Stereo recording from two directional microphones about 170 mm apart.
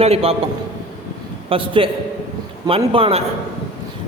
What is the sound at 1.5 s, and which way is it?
A man's voice, 30° right (ahead or behind).